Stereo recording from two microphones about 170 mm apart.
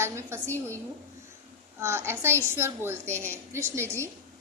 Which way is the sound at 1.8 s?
15° right (ahead or behind).